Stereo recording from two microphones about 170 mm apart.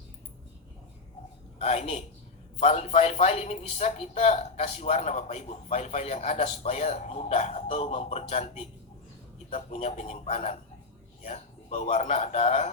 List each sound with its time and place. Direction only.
1.5 s a man's voice: 45° left (ahead or behind)